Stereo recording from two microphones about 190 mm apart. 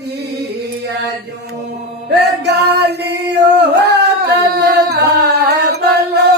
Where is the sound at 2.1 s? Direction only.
60° right (ahead or behind).